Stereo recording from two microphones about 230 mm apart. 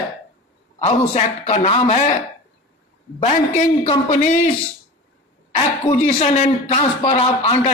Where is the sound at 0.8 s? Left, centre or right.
Left.